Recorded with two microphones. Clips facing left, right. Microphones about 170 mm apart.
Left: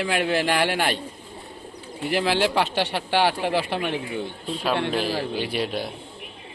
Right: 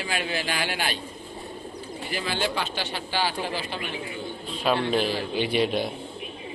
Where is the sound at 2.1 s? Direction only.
70° left (ahead or behind).